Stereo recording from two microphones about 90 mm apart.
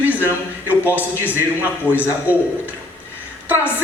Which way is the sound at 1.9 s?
15° right (ahead or behind).